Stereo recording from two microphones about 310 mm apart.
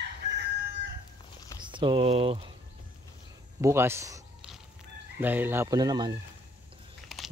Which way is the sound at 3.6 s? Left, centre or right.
Centre.